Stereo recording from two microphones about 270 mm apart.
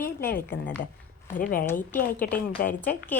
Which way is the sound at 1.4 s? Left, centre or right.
Left.